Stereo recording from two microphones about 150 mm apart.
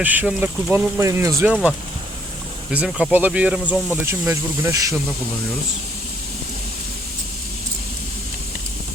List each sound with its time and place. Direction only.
0.0 s speech: 10° right (ahead or behind)
2.7 s speech: 10° right (ahead or behind)